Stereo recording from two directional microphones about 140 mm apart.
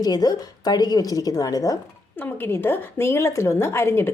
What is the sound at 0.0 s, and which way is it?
A woman's voice, 30° left (ahead or behind).